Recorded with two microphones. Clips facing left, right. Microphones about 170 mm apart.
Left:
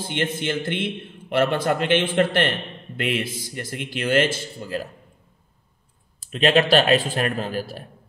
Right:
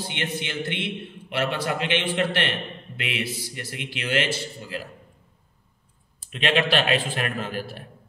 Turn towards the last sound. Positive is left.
turn(degrees=40)  # may be behind; listen again after turning